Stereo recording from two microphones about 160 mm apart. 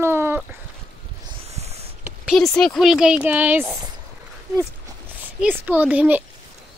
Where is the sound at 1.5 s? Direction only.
40° right (ahead or behind).